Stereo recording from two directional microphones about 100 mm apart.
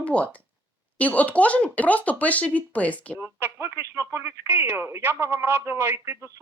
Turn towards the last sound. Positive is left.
turn(degrees=-30)  # may be behind; listen again after turning